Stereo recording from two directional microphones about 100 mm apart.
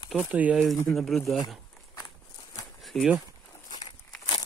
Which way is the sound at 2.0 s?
40° left (ahead or behind).